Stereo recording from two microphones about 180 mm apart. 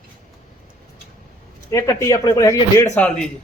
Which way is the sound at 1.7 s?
15° left (ahead or behind).